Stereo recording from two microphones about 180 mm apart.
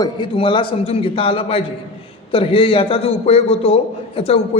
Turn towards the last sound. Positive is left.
turn(degrees=35)  # may be behind; listen again after turning